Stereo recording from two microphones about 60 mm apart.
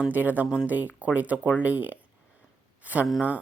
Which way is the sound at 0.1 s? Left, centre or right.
Right.